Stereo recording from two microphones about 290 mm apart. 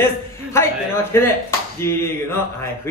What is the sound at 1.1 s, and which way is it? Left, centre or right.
Speech, centre.